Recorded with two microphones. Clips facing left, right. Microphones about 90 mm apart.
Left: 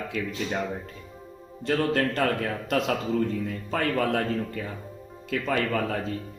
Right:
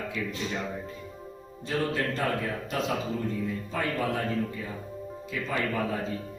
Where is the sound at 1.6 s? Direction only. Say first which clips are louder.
Left 4 dB; 75° left (ahead or behind).